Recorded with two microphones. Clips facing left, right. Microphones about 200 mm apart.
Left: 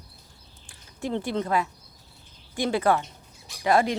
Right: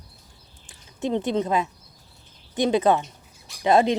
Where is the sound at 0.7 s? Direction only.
20° right (ahead or behind).